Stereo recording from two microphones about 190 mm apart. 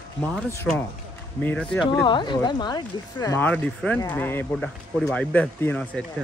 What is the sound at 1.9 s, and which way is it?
Speech, 25° left (ahead or behind).